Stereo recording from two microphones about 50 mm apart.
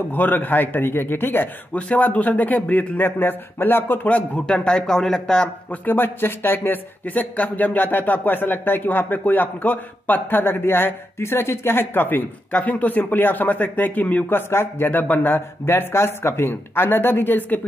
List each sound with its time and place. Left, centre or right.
0.1 s speech: left
1.7 s speech: left
4.5 s speech: centre
5.7 s speech: left
7.1 s speech: left
14.3 s speech: left
14.9 s speech: left
15.6 s speech: left